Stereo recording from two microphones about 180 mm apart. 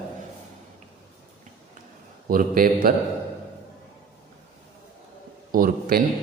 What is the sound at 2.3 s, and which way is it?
Speech, 50° right (ahead or behind).